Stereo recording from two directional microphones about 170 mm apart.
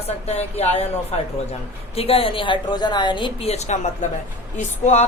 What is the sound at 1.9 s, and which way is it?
A woman's voice, 35° left (ahead or behind).